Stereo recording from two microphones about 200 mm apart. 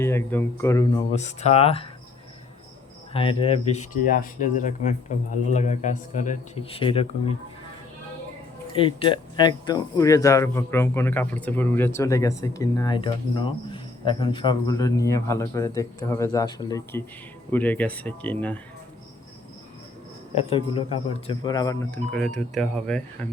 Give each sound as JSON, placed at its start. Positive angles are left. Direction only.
{"t": 0.0, "sound": "speech", "side_deg": 10}
{"t": 1.1, "sound": "speech", "side_deg": 35}
{"t": 3.1, "sound": "speech", "side_deg": 25}
{"t": 8.7, "sound": "speech", "side_deg": 25}
{"t": 20.3, "sound": "speech", "side_deg": 25}
{"t": 22.1, "sound": "speech", "side_deg": 5}